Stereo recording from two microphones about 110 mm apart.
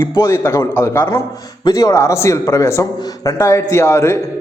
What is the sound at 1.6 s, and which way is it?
A man's voice, 35° left (ahead or behind).